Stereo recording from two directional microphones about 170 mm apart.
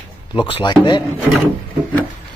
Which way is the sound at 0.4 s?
30° left (ahead or behind).